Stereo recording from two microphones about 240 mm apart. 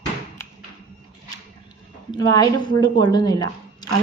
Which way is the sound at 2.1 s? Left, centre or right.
Centre.